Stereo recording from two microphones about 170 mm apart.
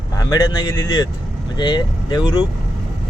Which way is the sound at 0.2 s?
25° left (ahead or behind).